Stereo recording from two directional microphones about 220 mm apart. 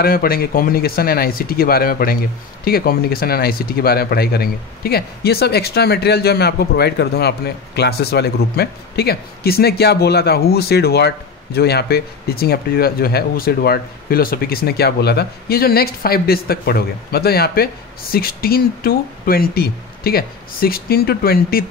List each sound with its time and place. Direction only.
0.0 s speech: 40° left (ahead or behind)